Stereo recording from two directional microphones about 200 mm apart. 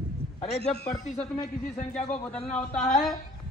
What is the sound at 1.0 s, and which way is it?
Speech, 35° left (ahead or behind).